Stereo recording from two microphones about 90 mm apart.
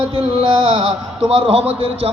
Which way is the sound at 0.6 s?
90° right.